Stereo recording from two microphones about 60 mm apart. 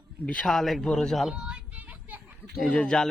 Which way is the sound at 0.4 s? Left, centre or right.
Centre.